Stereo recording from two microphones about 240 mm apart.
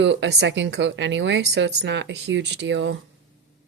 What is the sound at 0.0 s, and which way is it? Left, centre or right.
Speech, right.